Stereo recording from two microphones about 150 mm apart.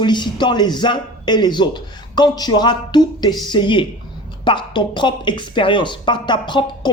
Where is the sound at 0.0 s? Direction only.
30° left (ahead or behind).